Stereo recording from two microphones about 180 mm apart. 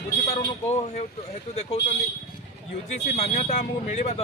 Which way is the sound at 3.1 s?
40° left (ahead or behind).